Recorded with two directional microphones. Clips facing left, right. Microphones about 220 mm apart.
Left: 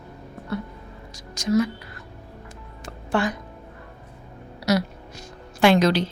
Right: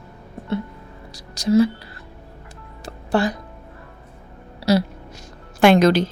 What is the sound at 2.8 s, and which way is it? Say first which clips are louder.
Music: right 4 dB; 35° right (ahead or behind).